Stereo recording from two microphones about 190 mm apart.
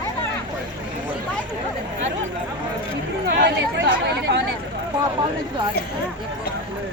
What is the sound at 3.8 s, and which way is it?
Chatter, 70° right (ahead or behind).